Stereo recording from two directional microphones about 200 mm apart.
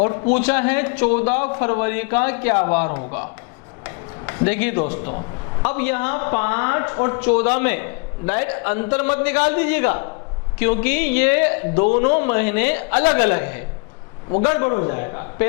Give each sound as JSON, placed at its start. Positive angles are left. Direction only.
{"t": 0.3, "sound": "speech", "side_deg": 10}
{"t": 3.8, "sound": "a sound", "side_deg": 15}
{"t": 5.6, "sound": "speech", "side_deg": 15}